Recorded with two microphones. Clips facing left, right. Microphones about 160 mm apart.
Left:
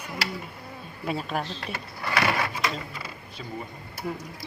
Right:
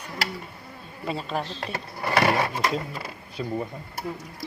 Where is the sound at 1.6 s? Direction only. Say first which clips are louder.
Right 3 dB; 35° right (ahead or behind).